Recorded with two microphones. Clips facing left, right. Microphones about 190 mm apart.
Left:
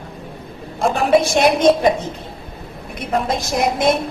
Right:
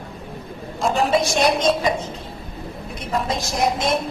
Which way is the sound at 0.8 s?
55° left (ahead or behind).